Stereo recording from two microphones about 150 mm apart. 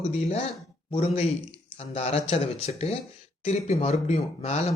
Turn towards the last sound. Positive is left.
turn(degrees=45)  # may be behind; listen again after turning